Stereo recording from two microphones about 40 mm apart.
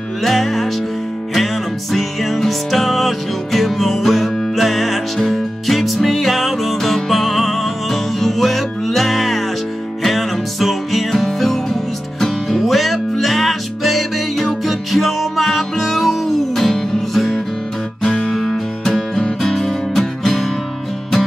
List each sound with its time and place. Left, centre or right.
0.2 s music: centre
19.9 s music: centre